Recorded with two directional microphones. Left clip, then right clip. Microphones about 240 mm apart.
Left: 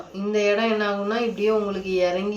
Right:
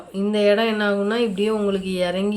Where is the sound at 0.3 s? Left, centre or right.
Right.